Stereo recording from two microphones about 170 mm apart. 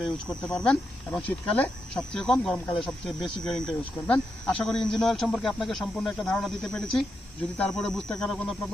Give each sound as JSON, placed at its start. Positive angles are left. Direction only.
{"t": 0.0, "sound": "speech", "side_deg": 5}